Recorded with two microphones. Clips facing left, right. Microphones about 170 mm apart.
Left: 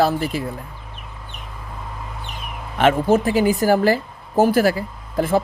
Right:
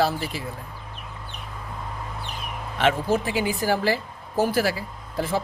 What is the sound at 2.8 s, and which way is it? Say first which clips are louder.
A woman's voice: left 6 dB; 50° left (ahead or behind).